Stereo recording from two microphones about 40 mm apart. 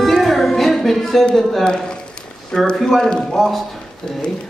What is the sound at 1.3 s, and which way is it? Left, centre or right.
Speech, centre.